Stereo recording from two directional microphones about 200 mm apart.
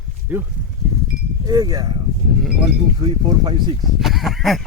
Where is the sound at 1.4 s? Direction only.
20° right (ahead or behind).